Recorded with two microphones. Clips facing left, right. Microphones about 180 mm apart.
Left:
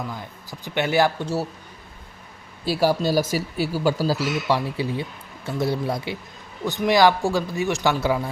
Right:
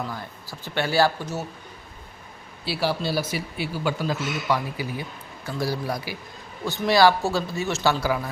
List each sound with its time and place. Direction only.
0.1 s speech: 20° left (ahead or behind)
2.6 s speech: 45° left (ahead or behind); by 8.3 s 25° left (ahead or behind)